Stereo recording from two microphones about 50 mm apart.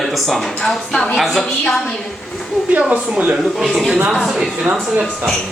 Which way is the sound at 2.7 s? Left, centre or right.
Right.